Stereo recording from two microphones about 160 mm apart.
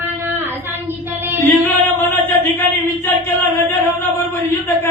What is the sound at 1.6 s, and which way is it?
Music, 15° left (ahead or behind).